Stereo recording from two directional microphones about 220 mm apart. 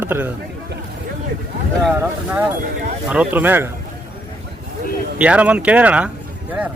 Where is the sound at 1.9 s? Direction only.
10° right (ahead or behind).